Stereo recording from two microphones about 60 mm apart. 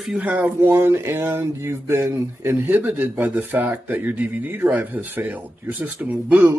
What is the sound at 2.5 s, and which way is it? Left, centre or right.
Speech, right.